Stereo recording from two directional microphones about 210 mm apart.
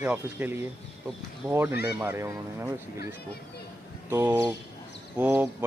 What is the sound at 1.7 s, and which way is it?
Speech, 50° left (ahead or behind).